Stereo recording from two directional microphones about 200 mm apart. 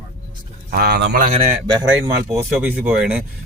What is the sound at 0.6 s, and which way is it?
Speech, 55° right (ahead or behind).